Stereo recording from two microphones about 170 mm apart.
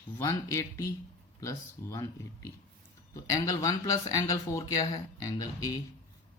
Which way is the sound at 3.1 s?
20° left (ahead or behind).